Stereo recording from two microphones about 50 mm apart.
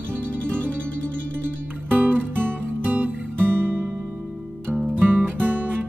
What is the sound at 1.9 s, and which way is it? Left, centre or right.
Music, right.